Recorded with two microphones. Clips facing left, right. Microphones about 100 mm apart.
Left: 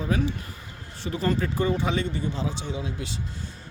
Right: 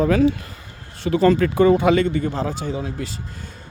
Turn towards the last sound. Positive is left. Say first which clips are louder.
# right 6 dB
turn(degrees=-45)  # may be behind; listen again after turning